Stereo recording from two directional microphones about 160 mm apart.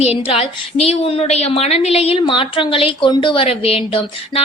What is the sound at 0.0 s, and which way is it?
A woman's voice, 40° left (ahead or behind).